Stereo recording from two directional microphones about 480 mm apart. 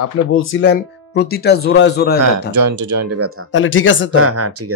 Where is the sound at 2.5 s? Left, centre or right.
Right.